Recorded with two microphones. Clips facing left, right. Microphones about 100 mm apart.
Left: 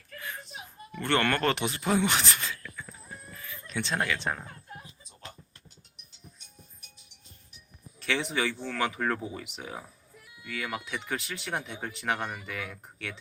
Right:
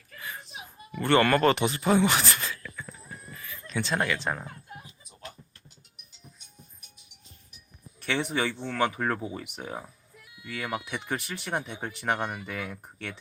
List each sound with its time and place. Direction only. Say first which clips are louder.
0.2 s speech: right 1 dB; 5° right (ahead or behind)
2.4 s a sound: right 2 dB; 5° right (ahead or behind)
3.7 s speech: right 2 dB; centre (ahead or behind)
8.1 s speech: right 1 dB; 5° right (ahead or behind)
10.8 s speech: right 1 dB; 15° right (ahead or behind)
12.0 s speech: right 3 dB; 5° right (ahead or behind)